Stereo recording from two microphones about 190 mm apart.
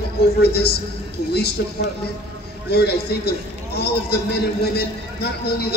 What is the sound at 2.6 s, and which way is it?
A man's voice, 60° left (ahead or behind).